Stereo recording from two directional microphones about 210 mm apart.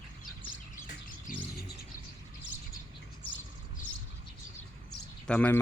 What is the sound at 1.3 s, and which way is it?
Bird, 40° left (ahead or behind).